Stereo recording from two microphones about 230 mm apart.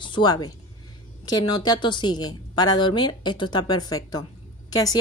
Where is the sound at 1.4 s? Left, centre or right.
Centre.